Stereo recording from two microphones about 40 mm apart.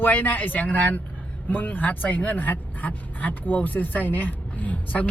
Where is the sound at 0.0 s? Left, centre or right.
Left.